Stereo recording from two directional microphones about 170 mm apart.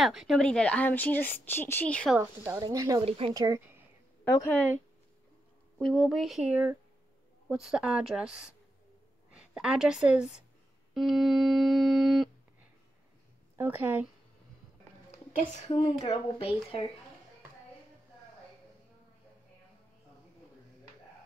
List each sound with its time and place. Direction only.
0.0 s speech: centre (ahead or behind)
2.1 s speech: 10° right (ahead or behind)
3.1 s speech: 35° right (ahead or behind)
3.3 s speech: 20° right (ahead or behind)
5.8 s music: centre (ahead or behind)
9.4 s a woman's voice: 5° right (ahead or behind)
11.0 s music: centre (ahead or behind)
13.6 s speech: 10° right (ahead or behind)
15.0 s speech: 35° left (ahead or behind)